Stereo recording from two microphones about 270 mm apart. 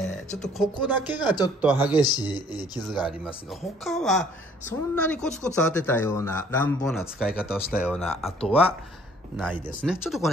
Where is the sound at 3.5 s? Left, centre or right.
Centre.